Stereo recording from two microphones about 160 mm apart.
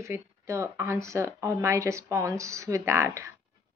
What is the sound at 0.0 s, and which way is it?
Speech, 20° right (ahead or behind).